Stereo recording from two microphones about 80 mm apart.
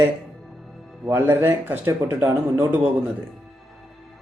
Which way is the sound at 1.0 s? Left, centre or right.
Right.